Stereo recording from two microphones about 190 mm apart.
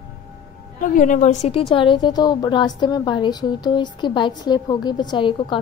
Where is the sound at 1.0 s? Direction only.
40° left (ahead or behind).